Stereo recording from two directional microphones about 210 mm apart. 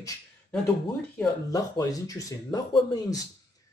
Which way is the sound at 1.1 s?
15° left (ahead or behind).